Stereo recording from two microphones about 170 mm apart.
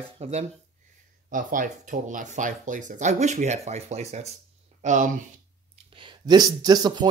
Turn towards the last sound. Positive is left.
turn(degrees=-25)  # may be behind; listen again after turning